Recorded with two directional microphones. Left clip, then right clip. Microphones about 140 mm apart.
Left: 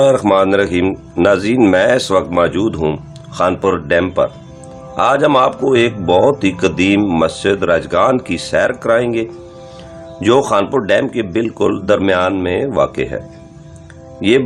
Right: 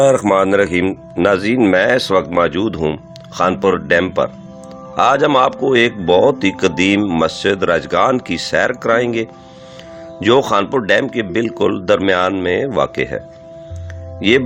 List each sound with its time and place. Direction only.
0.0 s speech: 45° right (ahead or behind)